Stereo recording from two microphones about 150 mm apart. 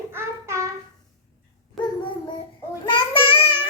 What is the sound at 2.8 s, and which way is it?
Child singing, 35° left (ahead or behind).